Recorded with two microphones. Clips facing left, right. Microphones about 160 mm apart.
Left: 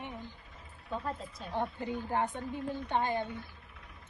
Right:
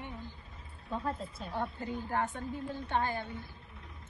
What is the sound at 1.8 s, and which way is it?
A woman's voice, 15° left (ahead or behind).